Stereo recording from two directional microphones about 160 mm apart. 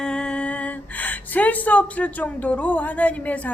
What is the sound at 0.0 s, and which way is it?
A woman's voice, 5° left (ahead or behind).